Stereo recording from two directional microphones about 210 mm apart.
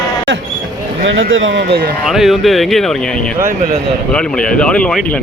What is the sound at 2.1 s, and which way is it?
Speech, centre (ahead or behind).